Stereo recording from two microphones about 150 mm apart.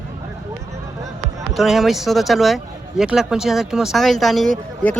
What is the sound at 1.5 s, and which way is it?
Speech, centre (ahead or behind).